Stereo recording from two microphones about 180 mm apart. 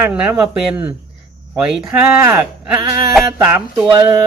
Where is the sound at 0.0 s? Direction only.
5° right (ahead or behind).